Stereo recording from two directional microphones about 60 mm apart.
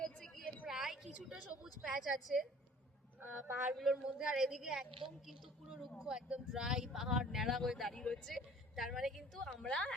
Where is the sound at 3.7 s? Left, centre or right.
Centre.